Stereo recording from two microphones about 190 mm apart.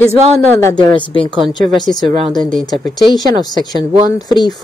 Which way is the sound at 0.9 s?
25° left (ahead or behind).